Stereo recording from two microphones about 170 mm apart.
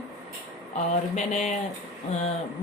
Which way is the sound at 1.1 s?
40° left (ahead or behind).